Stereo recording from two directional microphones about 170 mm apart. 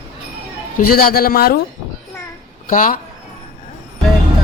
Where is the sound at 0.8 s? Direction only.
60° left (ahead or behind).